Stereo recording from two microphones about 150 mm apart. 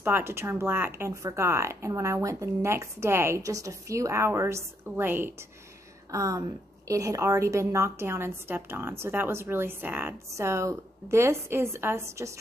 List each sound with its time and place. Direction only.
0.0 s a woman's voice: 15° right (ahead or behind)